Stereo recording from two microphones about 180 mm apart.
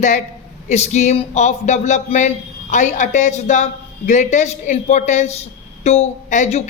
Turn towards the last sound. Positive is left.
turn(degrees=40)  # may be behind; listen again after turning